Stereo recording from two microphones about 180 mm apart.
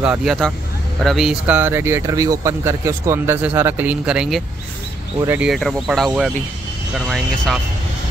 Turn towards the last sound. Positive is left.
turn(degrees=0)  # may be behind; listen again after turning